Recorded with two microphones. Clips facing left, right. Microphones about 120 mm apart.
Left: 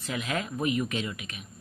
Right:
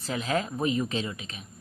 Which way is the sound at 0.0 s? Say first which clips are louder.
Right 3 dB; 30° right (ahead or behind).